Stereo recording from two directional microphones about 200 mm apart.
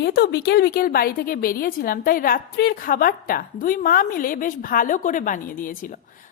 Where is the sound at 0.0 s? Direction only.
55° left (ahead or behind).